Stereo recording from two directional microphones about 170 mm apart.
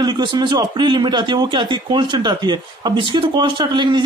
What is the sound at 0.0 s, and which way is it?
Speech, 25° right (ahead or behind).